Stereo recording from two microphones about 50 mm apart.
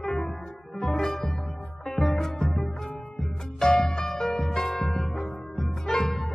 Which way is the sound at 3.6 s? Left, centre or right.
Centre.